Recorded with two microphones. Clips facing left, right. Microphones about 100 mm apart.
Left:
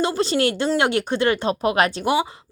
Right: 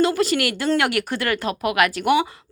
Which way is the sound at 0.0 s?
25° left (ahead or behind).